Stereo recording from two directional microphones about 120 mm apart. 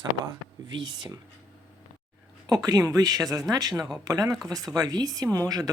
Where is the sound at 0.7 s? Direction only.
40° right (ahead or behind).